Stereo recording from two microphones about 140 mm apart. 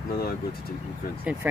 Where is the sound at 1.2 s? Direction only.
10° right (ahead or behind).